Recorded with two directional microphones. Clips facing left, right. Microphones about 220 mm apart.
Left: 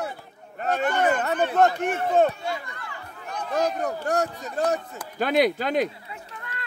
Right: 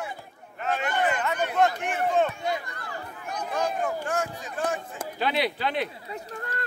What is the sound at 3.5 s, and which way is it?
Speech, 40° left (ahead or behind).